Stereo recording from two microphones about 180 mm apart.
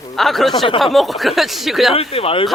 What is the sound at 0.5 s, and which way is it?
Speech, 30° left (ahead or behind).